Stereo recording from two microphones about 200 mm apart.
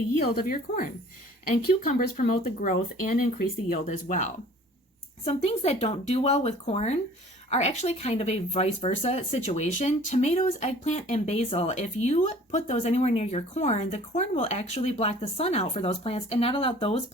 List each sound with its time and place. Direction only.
1.8 s speech: 40° left (ahead or behind)